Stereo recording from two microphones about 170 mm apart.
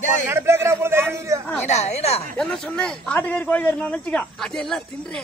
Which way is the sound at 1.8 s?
40° left (ahead or behind).